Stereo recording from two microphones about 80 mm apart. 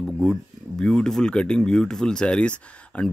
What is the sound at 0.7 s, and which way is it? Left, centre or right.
Speech, centre.